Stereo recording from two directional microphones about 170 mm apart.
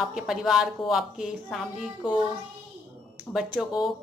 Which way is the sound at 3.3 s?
5° right (ahead or behind).